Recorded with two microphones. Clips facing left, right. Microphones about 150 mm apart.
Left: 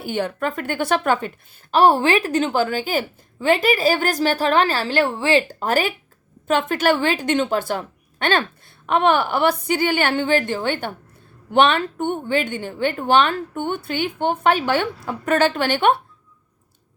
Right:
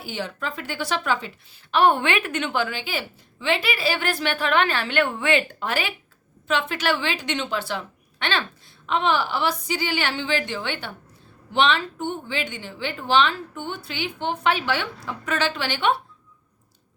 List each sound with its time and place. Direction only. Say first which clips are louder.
0.0 s a woman's voice: left 7 dB; 55° left (ahead or behind)
1.7 s a woman's voice: left 4 dB; 35° left (ahead or behind)